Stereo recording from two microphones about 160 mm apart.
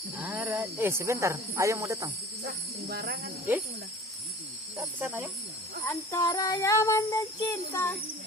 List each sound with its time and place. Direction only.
0.2 s speech: 10° right (ahead or behind)
2.8 s speech: 85° right
4.8 s speech: 10° right (ahead or behind)
5.8 s jingle bell: 20° left (ahead or behind)
6.1 s child singing: 20° left (ahead or behind)